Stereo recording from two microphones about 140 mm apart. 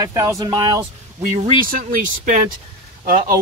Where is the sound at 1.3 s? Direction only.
80° right.